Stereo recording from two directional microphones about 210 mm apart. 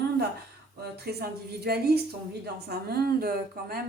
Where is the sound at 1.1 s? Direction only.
50° right (ahead or behind).